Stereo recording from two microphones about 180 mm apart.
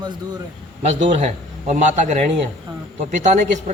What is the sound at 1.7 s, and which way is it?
A man's voice, 45° right (ahead or behind).